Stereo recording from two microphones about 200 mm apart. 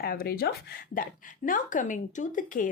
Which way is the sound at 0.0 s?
50° left (ahead or behind).